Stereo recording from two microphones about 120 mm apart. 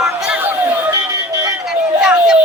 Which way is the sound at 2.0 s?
5° right (ahead or behind).